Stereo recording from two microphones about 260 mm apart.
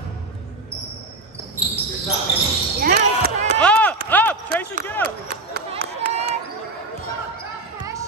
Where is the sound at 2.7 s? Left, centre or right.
Right.